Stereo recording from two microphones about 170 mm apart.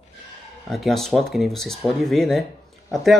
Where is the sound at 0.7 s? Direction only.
Centre (ahead or behind).